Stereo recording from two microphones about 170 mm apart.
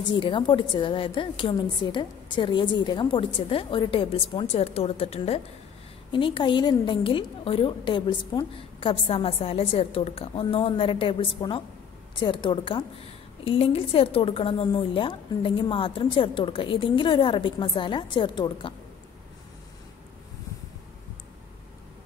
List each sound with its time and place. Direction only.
0.1 s a woman's voice: 30° left (ahead or behind)